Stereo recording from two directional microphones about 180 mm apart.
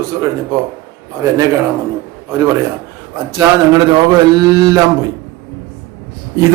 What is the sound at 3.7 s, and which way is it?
A man's voice, 20° right (ahead or behind).